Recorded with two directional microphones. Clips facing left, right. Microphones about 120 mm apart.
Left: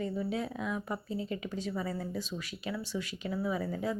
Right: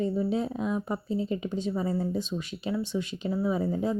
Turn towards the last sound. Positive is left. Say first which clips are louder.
# right 6 dB
turn(degrees=-25)  # may be behind; listen again after turning